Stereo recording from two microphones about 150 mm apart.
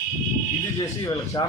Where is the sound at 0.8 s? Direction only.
25° left (ahead or behind).